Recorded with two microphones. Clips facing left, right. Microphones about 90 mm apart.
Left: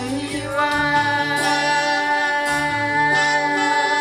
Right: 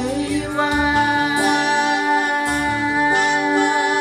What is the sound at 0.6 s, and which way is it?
Music, 30° right (ahead or behind).